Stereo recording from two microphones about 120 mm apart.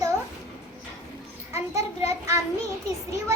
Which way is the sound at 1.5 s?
25° right (ahead or behind).